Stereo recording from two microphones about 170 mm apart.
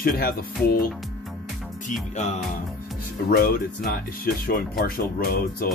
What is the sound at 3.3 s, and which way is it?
Speech, 60° left (ahead or behind).